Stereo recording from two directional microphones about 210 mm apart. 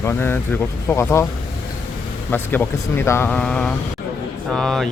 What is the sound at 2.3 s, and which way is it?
Speech, 10° left (ahead or behind).